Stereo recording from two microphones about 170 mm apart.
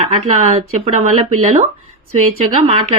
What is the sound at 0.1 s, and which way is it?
Speech, 40° right (ahead or behind).